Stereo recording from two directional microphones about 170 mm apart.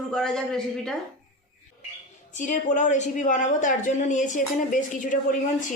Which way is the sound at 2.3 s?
45° left (ahead or behind).